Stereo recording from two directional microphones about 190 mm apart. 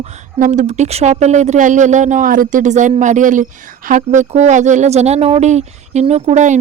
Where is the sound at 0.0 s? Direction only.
40° right (ahead or behind).